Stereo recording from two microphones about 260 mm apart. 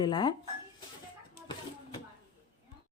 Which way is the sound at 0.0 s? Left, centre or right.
Centre.